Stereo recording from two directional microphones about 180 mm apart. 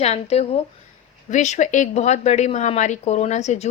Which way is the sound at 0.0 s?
35° left (ahead or behind).